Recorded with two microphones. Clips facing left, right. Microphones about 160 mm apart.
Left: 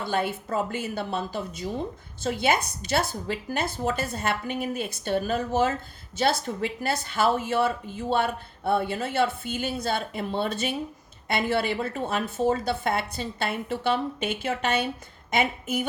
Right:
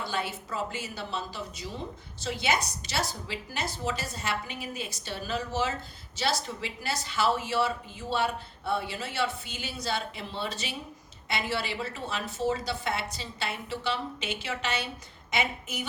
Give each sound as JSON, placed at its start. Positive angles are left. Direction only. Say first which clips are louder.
{"t": 0.0, "sound": "speech", "louder": "left 6 dB", "side_deg": 55}